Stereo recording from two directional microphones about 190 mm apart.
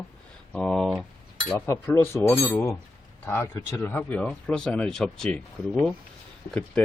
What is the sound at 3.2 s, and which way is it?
Speech, 10° left (ahead or behind).